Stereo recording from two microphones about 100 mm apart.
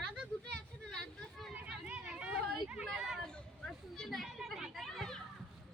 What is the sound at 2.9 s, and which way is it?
Speech, 5° right (ahead or behind).